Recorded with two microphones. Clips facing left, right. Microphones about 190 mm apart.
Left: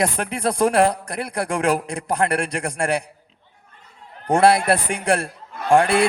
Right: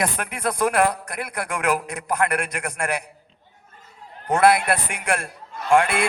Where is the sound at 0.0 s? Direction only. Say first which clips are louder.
Left 3 dB; 30° left (ahead or behind).